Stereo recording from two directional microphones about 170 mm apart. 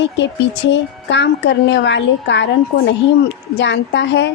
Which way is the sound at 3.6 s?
90° left.